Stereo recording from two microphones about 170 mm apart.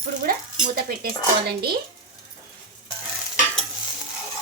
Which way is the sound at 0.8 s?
65° right (ahead or behind).